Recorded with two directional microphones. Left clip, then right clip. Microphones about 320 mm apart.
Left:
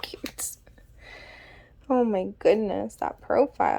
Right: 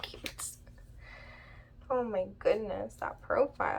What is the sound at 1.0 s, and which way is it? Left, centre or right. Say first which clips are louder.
A woman's voice: left 6 dB; left.